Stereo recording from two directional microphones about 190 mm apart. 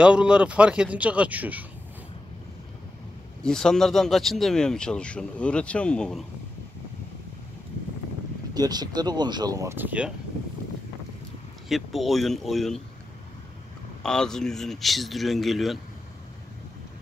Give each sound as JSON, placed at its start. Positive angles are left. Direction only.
{"t": 0.0, "sound": "speech", "side_deg": -5}
{"t": 3.4, "sound": "speech", "side_deg": 5}
{"t": 8.5, "sound": "speech", "side_deg": -20}
{"t": 11.7, "sound": "speech", "side_deg": 0}
{"t": 14.0, "sound": "speech", "side_deg": 5}